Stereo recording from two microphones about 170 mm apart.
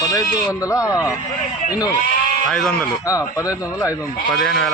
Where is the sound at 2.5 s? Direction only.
5° left (ahead or behind).